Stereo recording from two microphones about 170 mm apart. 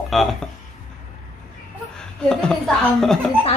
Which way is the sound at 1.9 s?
5° left (ahead or behind).